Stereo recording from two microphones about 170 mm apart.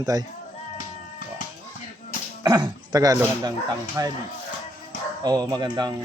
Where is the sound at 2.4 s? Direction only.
25° right (ahead or behind).